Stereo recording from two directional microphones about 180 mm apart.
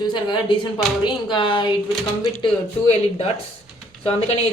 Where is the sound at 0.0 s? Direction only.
25° left (ahead or behind).